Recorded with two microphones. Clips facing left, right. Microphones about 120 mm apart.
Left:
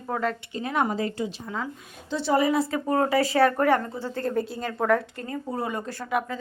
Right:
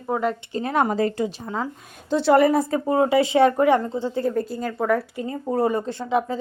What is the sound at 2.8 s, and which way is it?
Speech, 20° right (ahead or behind).